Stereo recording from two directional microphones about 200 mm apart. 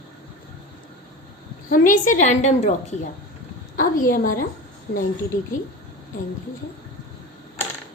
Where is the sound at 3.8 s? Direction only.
45° left (ahead or behind).